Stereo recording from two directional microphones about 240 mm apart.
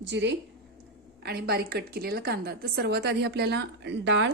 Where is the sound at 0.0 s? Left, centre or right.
Right.